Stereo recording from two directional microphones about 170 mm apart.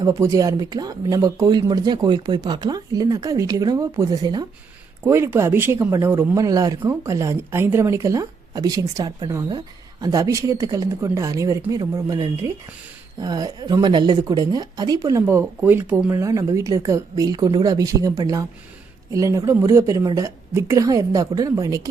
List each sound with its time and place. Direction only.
0.0 s speech: 20° right (ahead or behind)